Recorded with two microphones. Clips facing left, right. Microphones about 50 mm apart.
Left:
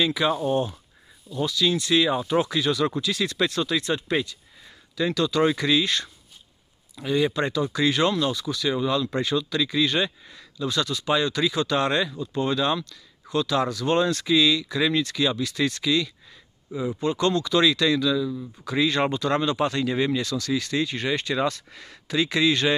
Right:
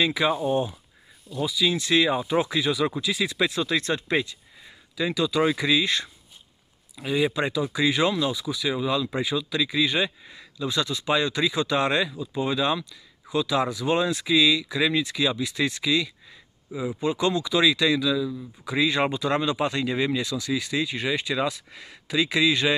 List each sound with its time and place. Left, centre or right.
0.0 s speech: right
0.3 s speech: centre
1.8 s speech: right
3.7 s speech: right
4.9 s speech: centre
7.1 s speech: centre